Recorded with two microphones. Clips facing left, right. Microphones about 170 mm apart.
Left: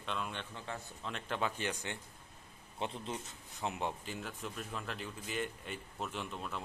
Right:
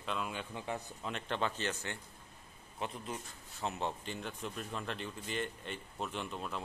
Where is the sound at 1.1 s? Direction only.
5° left (ahead or behind).